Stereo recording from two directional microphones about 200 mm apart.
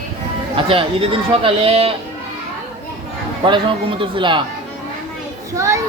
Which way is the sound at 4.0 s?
25° right (ahead or behind).